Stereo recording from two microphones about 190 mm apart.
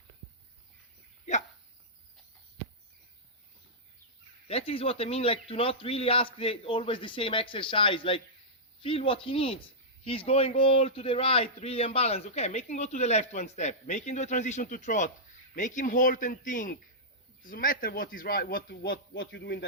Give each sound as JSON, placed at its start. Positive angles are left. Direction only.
{"t": 1.2, "sound": "dog", "side_deg": 40}
{"t": 4.4, "sound": "a man's voice", "side_deg": 30}